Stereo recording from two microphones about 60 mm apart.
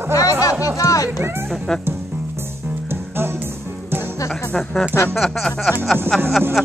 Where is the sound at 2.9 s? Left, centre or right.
Right.